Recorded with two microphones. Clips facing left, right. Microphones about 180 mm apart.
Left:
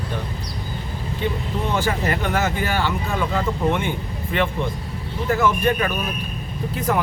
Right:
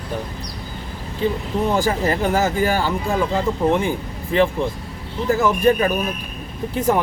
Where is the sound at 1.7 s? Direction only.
35° right (ahead or behind).